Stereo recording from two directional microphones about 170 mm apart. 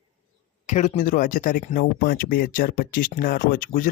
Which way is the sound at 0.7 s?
45° left (ahead or behind).